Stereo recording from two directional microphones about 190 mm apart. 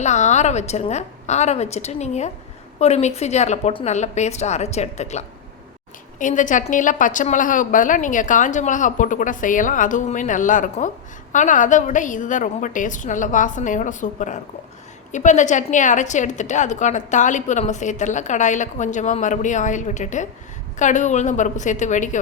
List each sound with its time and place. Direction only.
0.0 s a woman's voice: 35° left (ahead or behind)